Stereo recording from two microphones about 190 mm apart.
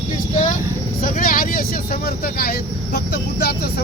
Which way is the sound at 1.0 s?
45° left (ahead or behind).